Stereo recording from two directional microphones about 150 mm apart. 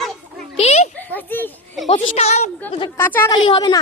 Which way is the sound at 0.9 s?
10° left (ahead or behind).